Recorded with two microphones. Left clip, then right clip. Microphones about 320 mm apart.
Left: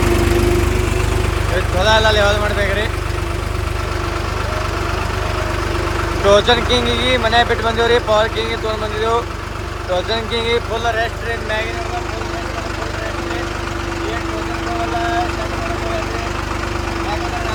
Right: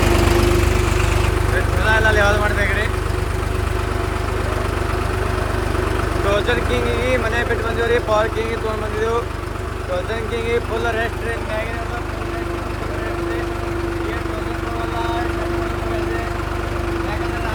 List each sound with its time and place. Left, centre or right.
0.0 s lawn mower: centre
1.9 s vehicle: centre
6.2 s speech: centre
10.1 s speech: centre